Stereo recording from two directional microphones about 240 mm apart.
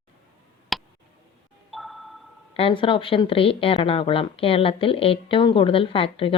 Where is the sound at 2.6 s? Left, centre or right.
Left.